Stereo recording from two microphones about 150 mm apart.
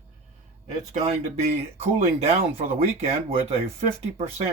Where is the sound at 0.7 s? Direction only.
50° right (ahead or behind).